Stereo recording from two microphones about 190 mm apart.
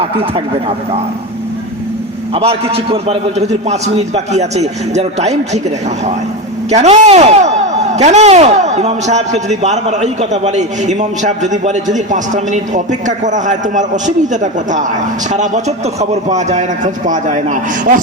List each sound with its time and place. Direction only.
0.0 s speech: 30° right (ahead or behind)
2.3 s a man's voice: 30° right (ahead or behind)
6.7 s a man's voice: 35° right (ahead or behind)